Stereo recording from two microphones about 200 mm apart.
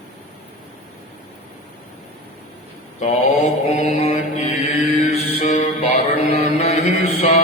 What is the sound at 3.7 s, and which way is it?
Mantra, 35° left (ahead or behind).